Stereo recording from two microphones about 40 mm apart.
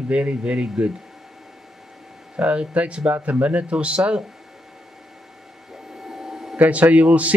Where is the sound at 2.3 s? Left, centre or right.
Right.